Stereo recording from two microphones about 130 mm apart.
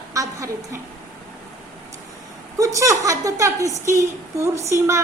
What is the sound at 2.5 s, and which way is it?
Speech, 25° right (ahead or behind).